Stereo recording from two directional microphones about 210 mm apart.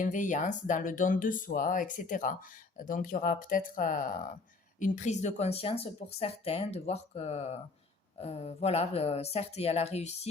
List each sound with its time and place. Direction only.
0.0 s a woman's voice: 40° left (ahead or behind)